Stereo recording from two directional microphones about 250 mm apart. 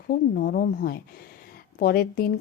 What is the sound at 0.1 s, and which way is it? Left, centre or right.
Speech, left.